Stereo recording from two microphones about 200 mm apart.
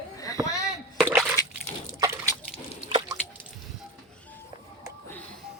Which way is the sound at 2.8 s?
20° right (ahead or behind).